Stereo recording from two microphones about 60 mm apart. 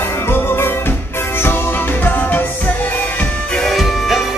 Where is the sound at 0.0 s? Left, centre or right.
Left.